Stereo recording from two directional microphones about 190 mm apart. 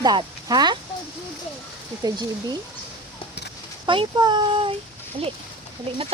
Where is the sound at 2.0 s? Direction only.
20° right (ahead or behind).